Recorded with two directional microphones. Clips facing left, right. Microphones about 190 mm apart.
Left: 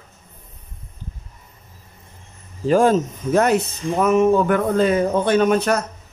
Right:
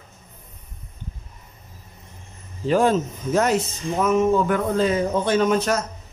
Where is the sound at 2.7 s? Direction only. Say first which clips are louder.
Left 3 dB; 45° left (ahead or behind).